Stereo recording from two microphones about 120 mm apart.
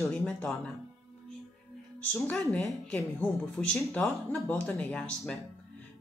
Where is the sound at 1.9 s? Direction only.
15° left (ahead or behind).